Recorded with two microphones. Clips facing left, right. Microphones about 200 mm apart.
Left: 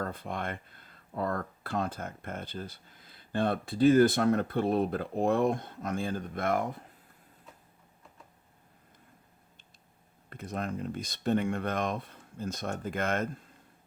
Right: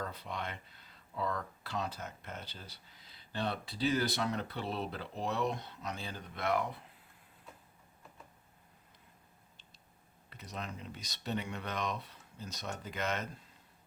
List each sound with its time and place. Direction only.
0.0 s speech: 50° left (ahead or behind)
10.2 s speech: 50° left (ahead or behind)